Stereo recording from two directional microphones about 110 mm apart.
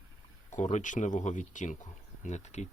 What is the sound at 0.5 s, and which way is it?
Speech, 90° left.